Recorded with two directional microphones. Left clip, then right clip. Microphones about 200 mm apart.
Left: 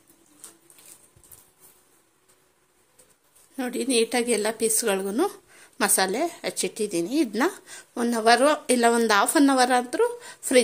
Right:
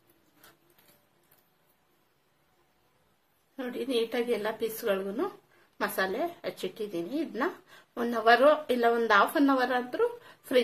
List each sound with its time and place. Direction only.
3.5 s a woman's voice: 45° left (ahead or behind)